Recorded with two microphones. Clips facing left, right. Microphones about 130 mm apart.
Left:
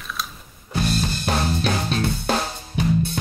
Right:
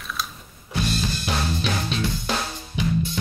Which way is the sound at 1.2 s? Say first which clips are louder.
Left 3 dB; 45° left (ahead or behind).